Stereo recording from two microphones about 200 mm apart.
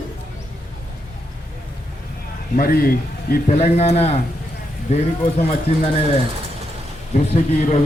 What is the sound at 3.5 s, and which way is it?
Speech, 35° left (ahead or behind).